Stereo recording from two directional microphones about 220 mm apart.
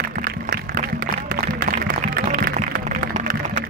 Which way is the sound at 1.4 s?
40° right (ahead or behind).